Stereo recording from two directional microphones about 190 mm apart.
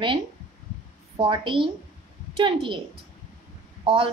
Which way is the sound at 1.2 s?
25° right (ahead or behind).